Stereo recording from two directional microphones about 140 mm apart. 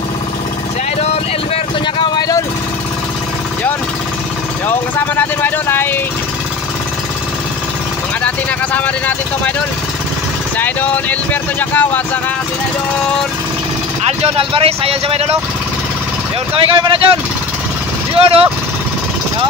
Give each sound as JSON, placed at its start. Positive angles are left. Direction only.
{"t": 2.0, "sound": "vehicle", "side_deg": 30}
{"t": 4.6, "sound": "speech", "side_deg": 15}
{"t": 8.7, "sound": "speech", "side_deg": 10}
{"t": 10.6, "sound": "speech", "side_deg": 10}
{"t": 14.2, "sound": "speech", "side_deg": -40}
{"t": 16.5, "sound": "speech", "side_deg": -40}